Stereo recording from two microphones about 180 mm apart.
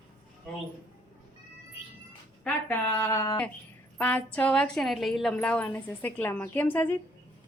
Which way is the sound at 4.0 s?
5° left (ahead or behind).